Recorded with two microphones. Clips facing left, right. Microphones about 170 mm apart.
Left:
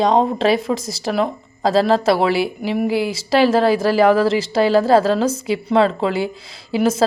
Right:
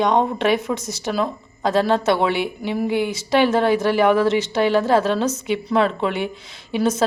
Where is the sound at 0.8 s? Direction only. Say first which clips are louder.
Left 2 dB; 90° left.